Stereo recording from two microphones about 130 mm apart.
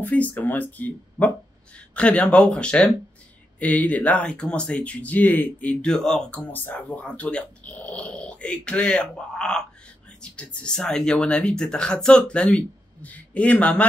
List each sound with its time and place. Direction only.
0.0 s speech: 10° left (ahead or behind)
2.0 s speech: 10° left (ahead or behind)